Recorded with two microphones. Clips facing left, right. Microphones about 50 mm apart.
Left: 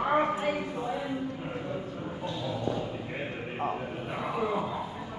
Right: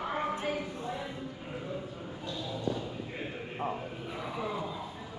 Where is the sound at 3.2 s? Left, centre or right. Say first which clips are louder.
Left 3 dB; left.